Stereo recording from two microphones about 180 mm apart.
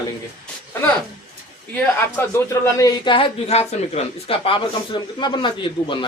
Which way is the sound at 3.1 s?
35° left (ahead or behind).